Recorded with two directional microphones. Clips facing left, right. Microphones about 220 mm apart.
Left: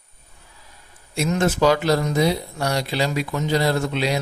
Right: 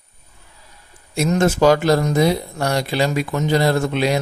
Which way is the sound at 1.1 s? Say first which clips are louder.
Right 4 dB; 45° right (ahead or behind).